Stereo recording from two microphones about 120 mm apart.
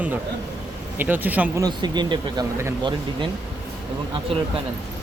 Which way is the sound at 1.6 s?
35° right (ahead or behind).